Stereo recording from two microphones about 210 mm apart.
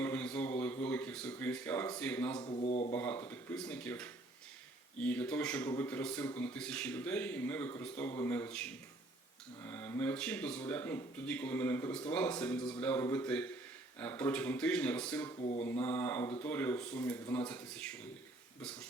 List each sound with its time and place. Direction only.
0.0 s a sound: 5° left (ahead or behind)
2.4 s speech: 25° left (ahead or behind)
2.9 s speech: 10° left (ahead or behind)
15.4 s speech: 30° left (ahead or behind)
15.6 s speech: 10° left (ahead or behind)